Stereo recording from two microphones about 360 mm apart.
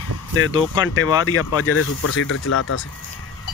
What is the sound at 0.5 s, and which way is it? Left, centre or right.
Speech, centre.